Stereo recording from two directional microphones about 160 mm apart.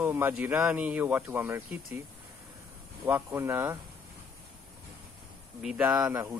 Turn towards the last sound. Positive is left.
turn(degrees=-5)  # may be behind; listen again after turning